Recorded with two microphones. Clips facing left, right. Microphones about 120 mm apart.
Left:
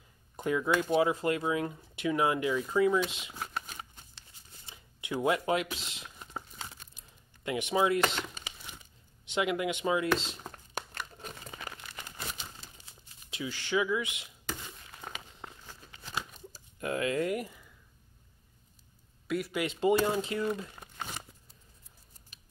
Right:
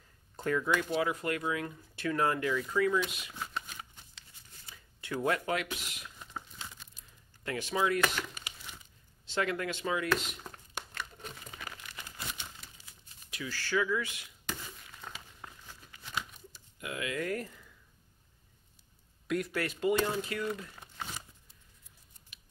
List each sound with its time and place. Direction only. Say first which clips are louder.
0.4 s speech: left 2 dB; 15° left (ahead or behind)
0.9 s speech: left 5 dB; 25° left (ahead or behind)
4.6 s speech: left 2 dB; 20° left (ahead or behind)
7.4 s speech: left 3 dB; 20° left (ahead or behind)
9.3 s speech: left 3 dB; 15° left (ahead or behind)
11.5 s crumpling: left 3 dB; 25° left (ahead or behind)
12.6 s a sound: left 2 dB; 30° left (ahead or behind)
13.3 s speech: left 2 dB; 20° left (ahead or behind)
15.4 s crumpling: left 2 dB; 25° left (ahead or behind)
16.5 s a sound: left 7 dB; 40° left (ahead or behind)
17.3 s a sound: left 2 dB; 10° left (ahead or behind)
19.2 s a sound: even; 5° left (ahead or behind)
19.5 s speech: left 4 dB; 20° left (ahead or behind)
22.3 s typing: right 1 dB; 40° left (ahead or behind)